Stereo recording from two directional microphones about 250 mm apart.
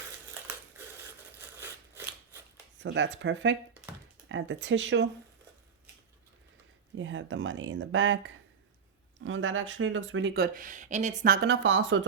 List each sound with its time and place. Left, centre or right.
2.7 s speech: right
6.9 s speech: right